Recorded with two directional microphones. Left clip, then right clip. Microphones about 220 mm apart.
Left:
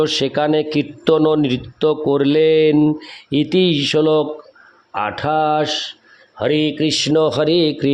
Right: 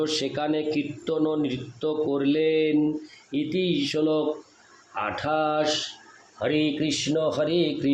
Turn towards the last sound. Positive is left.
turn(degrees=45)  # may be behind; listen again after turning